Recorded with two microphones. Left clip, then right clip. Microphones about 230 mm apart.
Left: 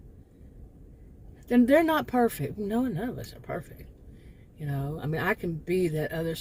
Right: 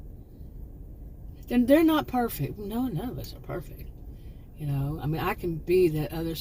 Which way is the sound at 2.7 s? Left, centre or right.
Left.